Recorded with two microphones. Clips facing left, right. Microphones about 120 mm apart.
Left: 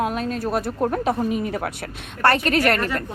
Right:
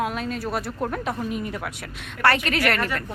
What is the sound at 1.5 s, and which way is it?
A woman's voice, 45° left (ahead or behind).